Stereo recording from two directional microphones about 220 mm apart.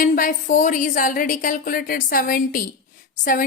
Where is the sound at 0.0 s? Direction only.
40° left (ahead or behind).